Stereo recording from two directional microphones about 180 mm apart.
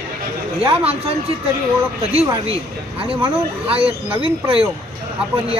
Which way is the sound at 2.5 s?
30° right (ahead or behind).